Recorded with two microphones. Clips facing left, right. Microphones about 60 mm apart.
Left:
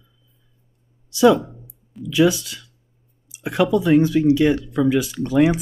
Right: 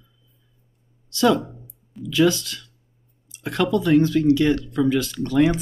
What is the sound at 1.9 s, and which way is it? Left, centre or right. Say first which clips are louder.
Speech: left 2 dB; centre.